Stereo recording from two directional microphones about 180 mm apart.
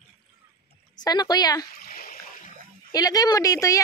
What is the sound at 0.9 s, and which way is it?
Speech, 20° left (ahead or behind).